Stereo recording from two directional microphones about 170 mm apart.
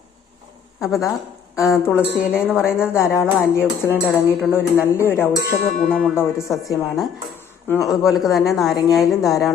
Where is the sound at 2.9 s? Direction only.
15° left (ahead or behind).